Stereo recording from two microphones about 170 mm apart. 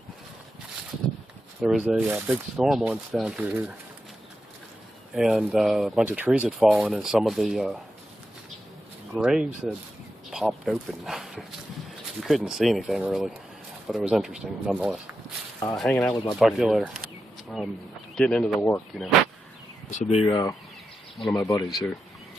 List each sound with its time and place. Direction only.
1.6 s speech: 5° right (ahead or behind)
5.1 s speech: 5° right (ahead or behind)
9.1 s speech: 5° right (ahead or behind)
19.9 s speech: 40° left (ahead or behind)
20.2 s speech: 20° left (ahead or behind)
21.2 s speech: centre (ahead or behind)